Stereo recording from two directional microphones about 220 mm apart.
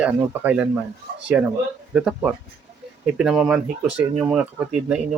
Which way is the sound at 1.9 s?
5° right (ahead or behind).